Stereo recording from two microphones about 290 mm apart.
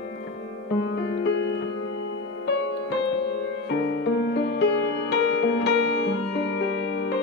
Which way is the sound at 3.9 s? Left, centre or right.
Left.